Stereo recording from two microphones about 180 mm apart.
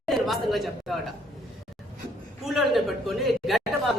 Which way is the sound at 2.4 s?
Centre (ahead or behind).